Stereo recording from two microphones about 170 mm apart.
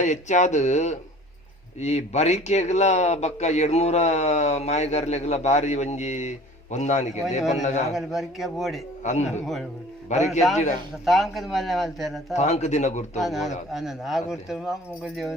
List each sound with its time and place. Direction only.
0.0 s speech: 45° left (ahead or behind)
7.9 s a man's voice: centre (ahead or behind)
10.1 s speech: 45° left (ahead or behind)
11.0 s a man's voice: centre (ahead or behind)
12.4 s speech: 40° left (ahead or behind)
13.1 s a man's voice: centre (ahead or behind)